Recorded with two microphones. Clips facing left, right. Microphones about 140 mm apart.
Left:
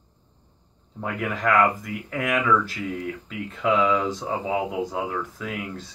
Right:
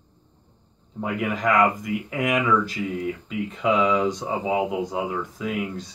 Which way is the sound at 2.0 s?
15° right (ahead or behind).